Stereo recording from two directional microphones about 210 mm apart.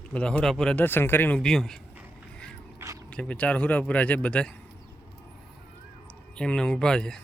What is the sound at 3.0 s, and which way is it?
Speech, 5° left (ahead or behind).